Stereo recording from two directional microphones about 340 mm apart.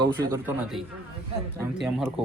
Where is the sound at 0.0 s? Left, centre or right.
Centre.